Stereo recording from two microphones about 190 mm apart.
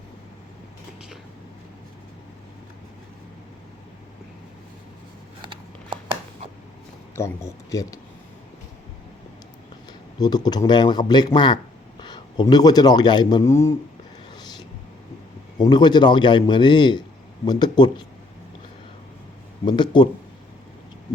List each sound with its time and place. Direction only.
5.4 s a sound: 25° right (ahead or behind)
7.2 s speech: 15° left (ahead or behind)
10.2 s speech: 20° left (ahead or behind)
14.3 s a sound: 20° left (ahead or behind)
15.5 s a man's voice: 20° left (ahead or behind)
19.6 s a man's voice: 25° left (ahead or behind)